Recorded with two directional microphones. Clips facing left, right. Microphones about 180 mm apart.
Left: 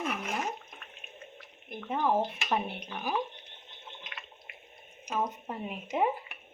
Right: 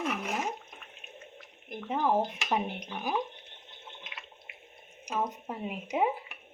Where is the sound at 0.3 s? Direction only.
10° right (ahead or behind).